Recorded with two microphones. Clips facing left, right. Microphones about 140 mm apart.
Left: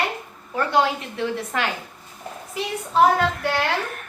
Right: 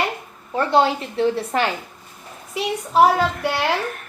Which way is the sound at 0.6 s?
30° right (ahead or behind).